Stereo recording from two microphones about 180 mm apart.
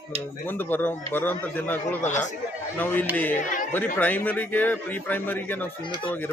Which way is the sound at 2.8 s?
10° left (ahead or behind).